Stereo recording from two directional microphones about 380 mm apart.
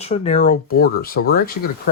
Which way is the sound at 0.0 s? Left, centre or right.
Centre.